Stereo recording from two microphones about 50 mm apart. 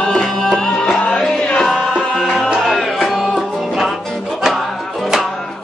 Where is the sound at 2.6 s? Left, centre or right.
Centre.